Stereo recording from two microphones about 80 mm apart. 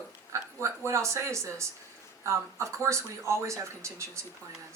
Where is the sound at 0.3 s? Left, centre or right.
Right.